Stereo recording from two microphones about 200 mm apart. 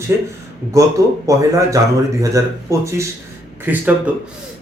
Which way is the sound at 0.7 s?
15° right (ahead or behind).